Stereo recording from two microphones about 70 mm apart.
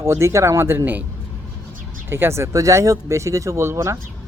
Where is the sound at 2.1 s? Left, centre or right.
Right.